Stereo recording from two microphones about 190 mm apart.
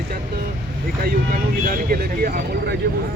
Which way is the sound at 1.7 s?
50° right (ahead or behind).